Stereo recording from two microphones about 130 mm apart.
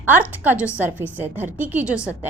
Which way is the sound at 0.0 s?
15° right (ahead or behind).